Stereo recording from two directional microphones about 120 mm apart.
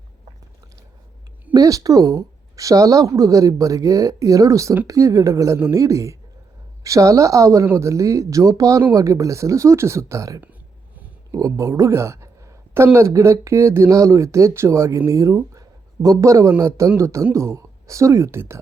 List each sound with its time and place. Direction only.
1.5 s speech: 30° right (ahead or behind)